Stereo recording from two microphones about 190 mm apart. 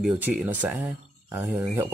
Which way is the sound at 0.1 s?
5° right (ahead or behind).